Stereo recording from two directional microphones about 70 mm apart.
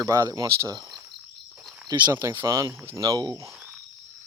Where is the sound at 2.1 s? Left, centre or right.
Right.